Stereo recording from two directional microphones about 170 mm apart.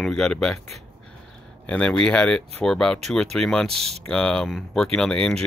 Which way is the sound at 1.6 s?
5° left (ahead or behind).